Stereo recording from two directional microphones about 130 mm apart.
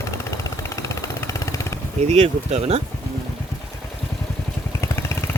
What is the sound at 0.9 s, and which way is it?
Vehicle, 25° left (ahead or behind).